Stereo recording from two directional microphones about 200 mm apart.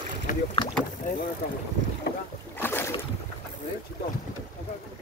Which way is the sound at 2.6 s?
10° left (ahead or behind).